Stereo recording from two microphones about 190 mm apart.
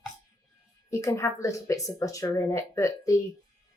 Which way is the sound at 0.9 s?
15° left (ahead or behind).